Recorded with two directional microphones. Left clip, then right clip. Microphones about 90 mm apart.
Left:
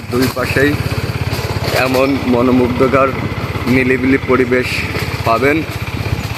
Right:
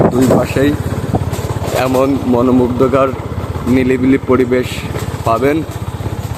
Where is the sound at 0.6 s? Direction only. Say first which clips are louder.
Left 1 dB; 20° right (ahead or behind).